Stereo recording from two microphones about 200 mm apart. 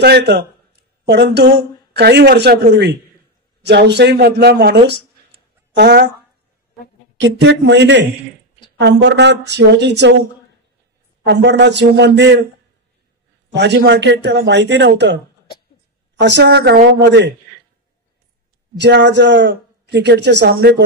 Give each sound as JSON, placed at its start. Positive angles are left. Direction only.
{"t": 0.0, "sound": "a man's voice", "side_deg": -55}
{"t": 7.2, "sound": "a man's voice", "side_deg": -65}
{"t": 11.2, "sound": "a man's voice", "side_deg": -60}
{"t": 13.5, "sound": "a man's voice", "side_deg": -60}
{"t": 16.2, "sound": "a man's voice", "side_deg": -60}
{"t": 18.8, "sound": "a man's voice", "side_deg": -60}